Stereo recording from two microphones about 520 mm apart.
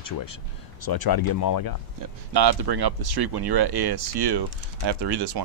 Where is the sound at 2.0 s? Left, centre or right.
Right.